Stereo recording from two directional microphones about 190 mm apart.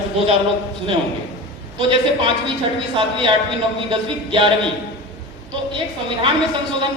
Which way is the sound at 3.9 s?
25° right (ahead or behind).